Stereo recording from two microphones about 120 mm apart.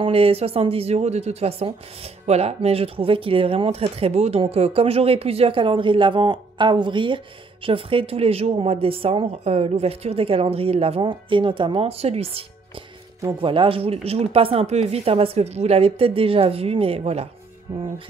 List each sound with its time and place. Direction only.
0.0 s speech: 50° right (ahead or behind)
13.4 s speech: 45° right (ahead or behind)